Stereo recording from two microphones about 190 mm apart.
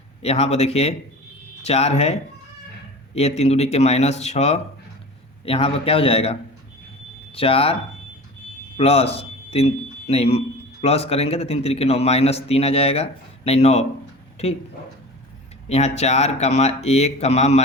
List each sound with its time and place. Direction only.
0.2 s a man's voice: 30° left (ahead or behind)
3.2 s a man's voice: 35° left (ahead or behind)
7.3 s speech: 30° left (ahead or behind)
8.8 s a man's voice: 30° left (ahead or behind)
15.7 s a man's voice: 35° left (ahead or behind)